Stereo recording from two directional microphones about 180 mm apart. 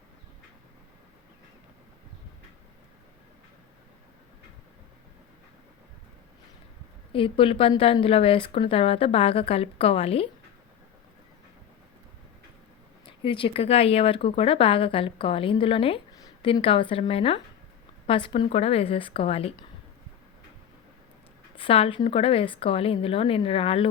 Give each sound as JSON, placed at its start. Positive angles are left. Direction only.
{"t": 7.1, "sound": "speech", "side_deg": 30}
{"t": 13.1, "sound": "speech", "side_deg": 30}
{"t": 21.5, "sound": "speech", "side_deg": 30}